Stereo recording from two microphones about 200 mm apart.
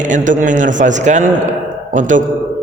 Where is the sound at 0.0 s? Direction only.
40° right (ahead or behind).